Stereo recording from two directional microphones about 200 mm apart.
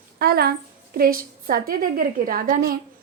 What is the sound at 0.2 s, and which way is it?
A woman's voice, 50° right (ahead or behind).